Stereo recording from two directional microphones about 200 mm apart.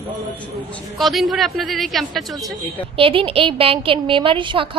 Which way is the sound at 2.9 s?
25° right (ahead or behind).